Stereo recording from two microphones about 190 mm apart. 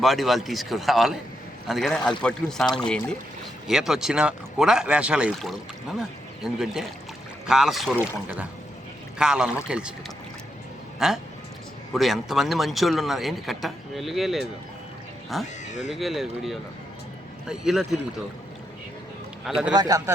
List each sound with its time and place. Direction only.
0.0 s a man's voice: centre (ahead or behind)
9.1 s a man's voice: 5° right (ahead or behind)
11.0 s a man's voice: 5° right (ahead or behind)
15.6 s speech: 40° left (ahead or behind)
15.9 s a man's voice: centre (ahead or behind)
19.5 s a man's voice: 5° right (ahead or behind)
19.7 s speech: 20° right (ahead or behind)